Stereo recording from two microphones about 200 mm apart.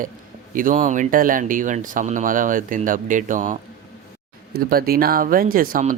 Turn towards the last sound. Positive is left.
turn(degrees=-45)  # may be behind; listen again after turning